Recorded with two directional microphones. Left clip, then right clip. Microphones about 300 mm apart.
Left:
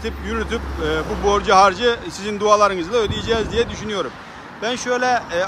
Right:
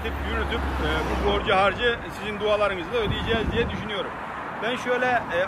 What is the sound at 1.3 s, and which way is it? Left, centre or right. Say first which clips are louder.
Speech: left 8 dB; centre.